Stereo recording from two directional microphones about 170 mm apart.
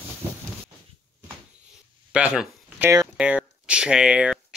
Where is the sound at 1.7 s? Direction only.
5° right (ahead or behind).